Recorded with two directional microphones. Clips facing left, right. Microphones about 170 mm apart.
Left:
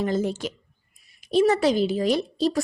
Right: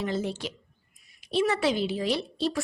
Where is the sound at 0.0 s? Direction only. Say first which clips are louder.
Left 5 dB; 45° left (ahead or behind).